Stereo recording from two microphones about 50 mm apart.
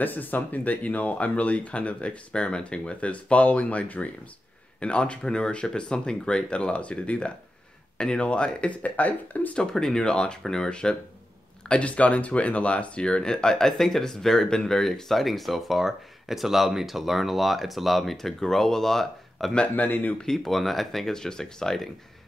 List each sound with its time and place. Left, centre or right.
0.0 s speech: left
9.6 s speech: centre
19.7 s speech: left
20.2 s speech: centre